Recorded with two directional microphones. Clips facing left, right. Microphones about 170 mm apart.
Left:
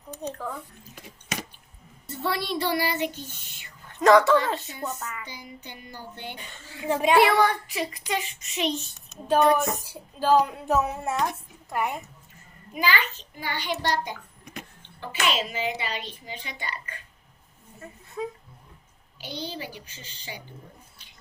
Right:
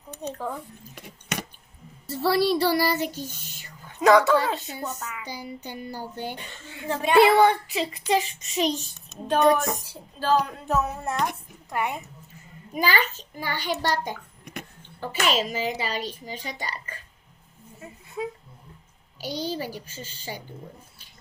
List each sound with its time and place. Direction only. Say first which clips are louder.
2.0 s a woman's voice: right 7 dB; 35° right (ahead or behind)
4.0 s speech: even; 5° right (ahead or behind)
5.2 s a child's voice: right 6 dB; 40° right (ahead or behind)
6.8 s speech: left 2 dB; 15° left (ahead or behind)
7.2 s a child's voice: right 7 dB; 25° right (ahead or behind)
8.7 s speech: even; centre (ahead or behind)
12.7 s a child's voice: right 2 dB; 40° right (ahead or behind)
18.2 s speech: right 1 dB; 10° right (ahead or behind)
19.2 s a child's voice: right 5 dB; 40° right (ahead or behind)